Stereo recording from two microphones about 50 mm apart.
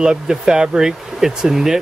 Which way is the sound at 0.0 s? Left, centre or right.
Centre.